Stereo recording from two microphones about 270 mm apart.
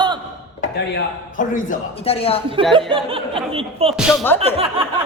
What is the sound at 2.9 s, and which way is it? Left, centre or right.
Speech, centre.